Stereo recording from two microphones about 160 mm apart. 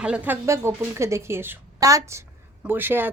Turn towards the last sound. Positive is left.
turn(degrees=-15)  # may be behind; listen again after turning